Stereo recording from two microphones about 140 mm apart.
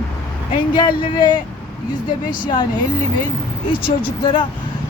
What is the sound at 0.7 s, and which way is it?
Speech, 35° left (ahead or behind).